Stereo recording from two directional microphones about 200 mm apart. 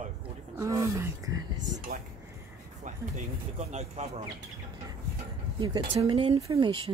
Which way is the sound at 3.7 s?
35° right (ahead or behind).